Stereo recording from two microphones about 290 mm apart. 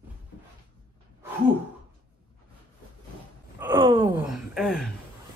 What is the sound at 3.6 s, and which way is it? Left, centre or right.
Wail, centre.